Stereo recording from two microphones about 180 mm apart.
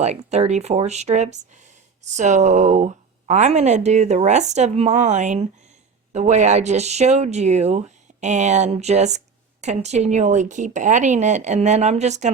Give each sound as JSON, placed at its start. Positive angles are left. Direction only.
{"t": 0.3, "sound": "speech", "side_deg": -35}